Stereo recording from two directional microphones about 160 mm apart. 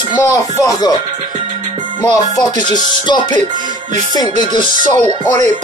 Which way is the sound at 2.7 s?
25° left (ahead or behind).